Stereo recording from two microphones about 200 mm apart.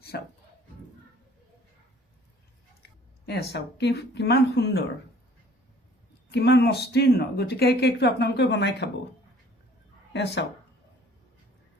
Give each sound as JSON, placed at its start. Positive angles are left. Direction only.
{"t": 0.1, "sound": "speech", "side_deg": 55}
{"t": 3.2, "sound": "speech", "side_deg": 55}
{"t": 6.3, "sound": "speech", "side_deg": 55}
{"t": 10.1, "sound": "speech", "side_deg": 60}